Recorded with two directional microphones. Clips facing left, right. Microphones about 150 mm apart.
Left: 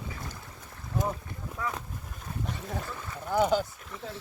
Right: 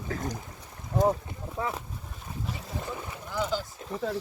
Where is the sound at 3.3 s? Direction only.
55° left (ahead or behind).